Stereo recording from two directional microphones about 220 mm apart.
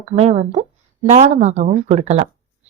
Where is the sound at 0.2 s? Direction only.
30° right (ahead or behind).